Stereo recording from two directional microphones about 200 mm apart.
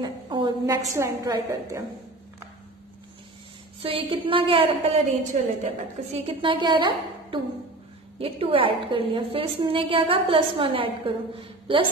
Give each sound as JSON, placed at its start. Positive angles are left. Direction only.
{"t": 0.0, "sound": "a woman's voice", "side_deg": -20}
{"t": 3.8, "sound": "a woman's voice", "side_deg": -25}